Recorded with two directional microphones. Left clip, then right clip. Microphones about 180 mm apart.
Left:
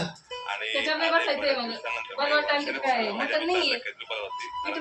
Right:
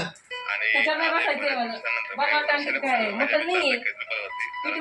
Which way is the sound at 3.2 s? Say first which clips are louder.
Right 3 dB; 35° left (ahead or behind).